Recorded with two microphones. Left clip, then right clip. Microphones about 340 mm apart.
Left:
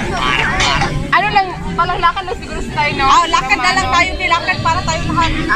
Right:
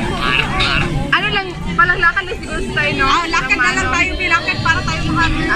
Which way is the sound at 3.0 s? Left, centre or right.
Centre.